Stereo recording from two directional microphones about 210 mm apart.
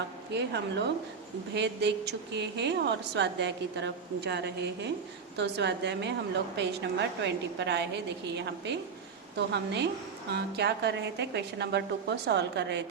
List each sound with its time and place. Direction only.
0.3 s a woman's voice: 55° right (ahead or behind)